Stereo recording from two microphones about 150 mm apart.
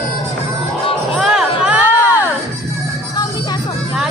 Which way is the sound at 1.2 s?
5° right (ahead or behind).